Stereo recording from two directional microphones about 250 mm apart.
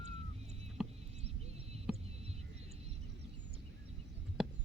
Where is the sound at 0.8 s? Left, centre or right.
Centre.